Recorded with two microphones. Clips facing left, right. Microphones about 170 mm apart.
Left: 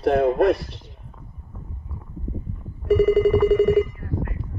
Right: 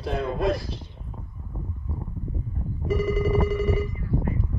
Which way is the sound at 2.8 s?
65° left (ahead or behind).